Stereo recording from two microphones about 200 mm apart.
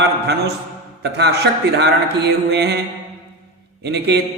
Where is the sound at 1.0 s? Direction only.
55° right (ahead or behind).